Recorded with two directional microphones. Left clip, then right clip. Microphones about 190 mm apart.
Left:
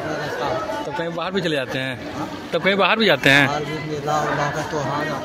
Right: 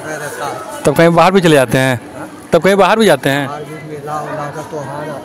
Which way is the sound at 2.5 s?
50° right (ahead or behind).